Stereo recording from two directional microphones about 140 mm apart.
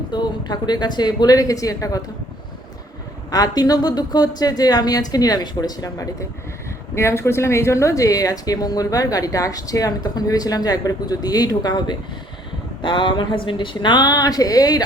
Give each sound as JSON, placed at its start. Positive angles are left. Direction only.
{"t": 0.1, "sound": "a woman's voice", "side_deg": 30}
{"t": 3.3, "sound": "a woman's voice", "side_deg": 25}